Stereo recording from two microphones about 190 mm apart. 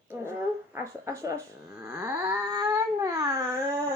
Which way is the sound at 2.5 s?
15° right (ahead or behind).